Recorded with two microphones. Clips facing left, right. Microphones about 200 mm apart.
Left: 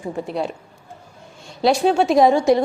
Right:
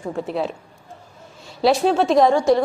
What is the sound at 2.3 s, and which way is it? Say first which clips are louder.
Speech: left 1 dB; 15° left (ahead or behind).